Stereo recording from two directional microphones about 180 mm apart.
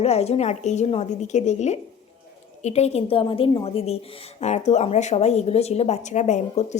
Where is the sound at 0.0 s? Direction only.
35° left (ahead or behind).